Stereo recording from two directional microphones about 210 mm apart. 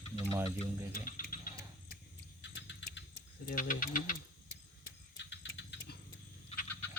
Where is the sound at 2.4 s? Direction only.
60° left (ahead or behind).